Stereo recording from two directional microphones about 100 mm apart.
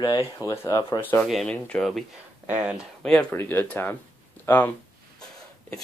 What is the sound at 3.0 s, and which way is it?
Speech, 10° left (ahead or behind).